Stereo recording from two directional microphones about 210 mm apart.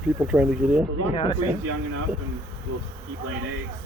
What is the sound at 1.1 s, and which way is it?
Speech, 25° left (ahead or behind).